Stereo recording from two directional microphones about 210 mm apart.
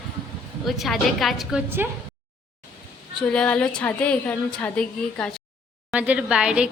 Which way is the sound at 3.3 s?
5° left (ahead or behind).